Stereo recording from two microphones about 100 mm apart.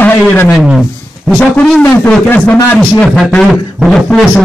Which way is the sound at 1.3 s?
10° left (ahead or behind).